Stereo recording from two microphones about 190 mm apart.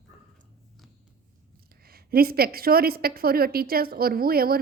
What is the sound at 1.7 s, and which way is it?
A woman's voice, 55° right (ahead or behind).